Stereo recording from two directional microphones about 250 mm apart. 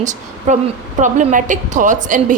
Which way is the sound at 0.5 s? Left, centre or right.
Right.